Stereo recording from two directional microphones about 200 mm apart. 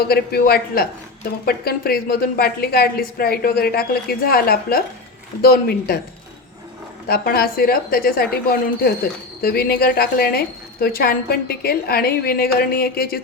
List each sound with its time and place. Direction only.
0.0 s speech: 50° left (ahead or behind)
7.1 s speech: 50° left (ahead or behind)